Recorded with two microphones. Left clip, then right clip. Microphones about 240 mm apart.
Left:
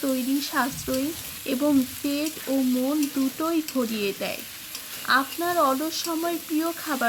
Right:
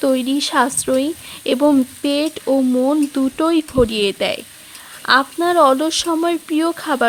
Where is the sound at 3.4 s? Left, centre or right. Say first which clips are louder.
Right 13 dB; right.